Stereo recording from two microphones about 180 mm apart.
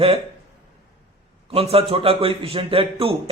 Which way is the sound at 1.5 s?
30° right (ahead or behind).